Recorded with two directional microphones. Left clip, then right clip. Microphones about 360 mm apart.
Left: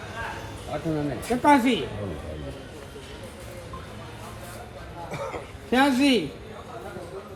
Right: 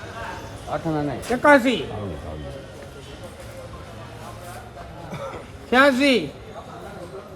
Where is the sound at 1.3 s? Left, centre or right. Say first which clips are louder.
Right 4 dB; centre.